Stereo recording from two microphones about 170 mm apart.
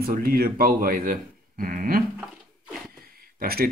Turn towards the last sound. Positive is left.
turn(degrees=-60)  # may be behind; listen again after turning